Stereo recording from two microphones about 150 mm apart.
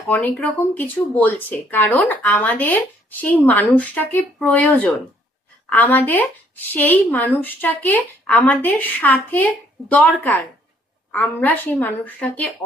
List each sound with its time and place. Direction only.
0.1 s speech: 10° left (ahead or behind)